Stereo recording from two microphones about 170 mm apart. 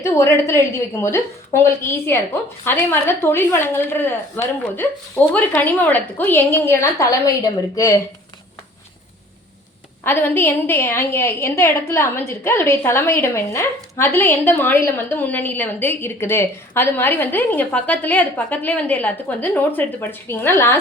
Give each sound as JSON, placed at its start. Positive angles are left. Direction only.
{"t": 0.0, "sound": "a woman's voice", "side_deg": 15}
{"t": 10.0, "sound": "a woman's voice", "side_deg": 15}